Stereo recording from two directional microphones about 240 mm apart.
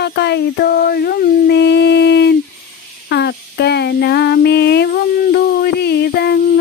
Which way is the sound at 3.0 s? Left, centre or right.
Left.